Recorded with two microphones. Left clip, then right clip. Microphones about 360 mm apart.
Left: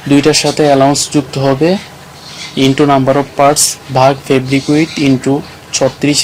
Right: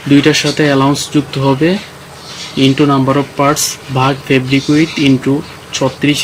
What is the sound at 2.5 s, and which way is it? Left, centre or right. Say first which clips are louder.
Speech: left 2 dB; centre.